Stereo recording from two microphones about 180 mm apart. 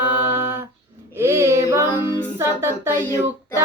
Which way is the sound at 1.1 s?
15° right (ahead or behind).